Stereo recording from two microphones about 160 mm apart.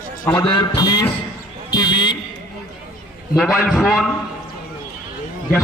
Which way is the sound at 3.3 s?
Centre (ahead or behind).